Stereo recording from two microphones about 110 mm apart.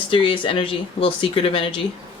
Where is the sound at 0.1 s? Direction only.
55° left (ahead or behind).